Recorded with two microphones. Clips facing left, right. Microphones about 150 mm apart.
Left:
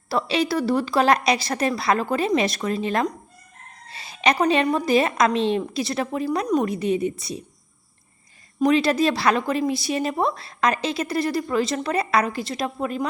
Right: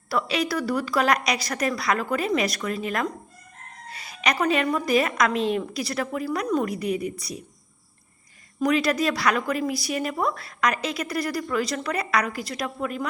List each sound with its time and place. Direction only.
0.1 s a woman's voice: 30° left (ahead or behind)
8.5 s a woman's voice: 25° left (ahead or behind)